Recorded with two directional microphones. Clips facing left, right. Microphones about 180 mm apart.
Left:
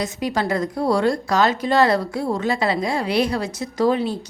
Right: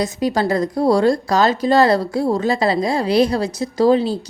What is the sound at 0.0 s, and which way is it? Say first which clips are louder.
A woman's voice: right 4 dB; 35° right (ahead or behind).